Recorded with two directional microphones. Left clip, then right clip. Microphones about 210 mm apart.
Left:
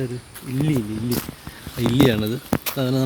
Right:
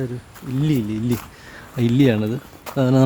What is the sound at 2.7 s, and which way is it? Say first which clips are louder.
Speech: right 8 dB; 30° right (ahead or behind).